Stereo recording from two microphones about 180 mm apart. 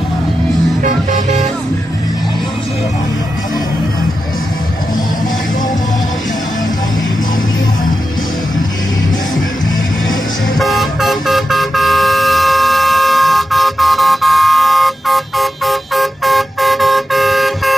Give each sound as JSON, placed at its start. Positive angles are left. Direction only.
{"t": 0.8, "sound": "music", "side_deg": -40}
{"t": 10.6, "sound": "vehicle", "side_deg": 0}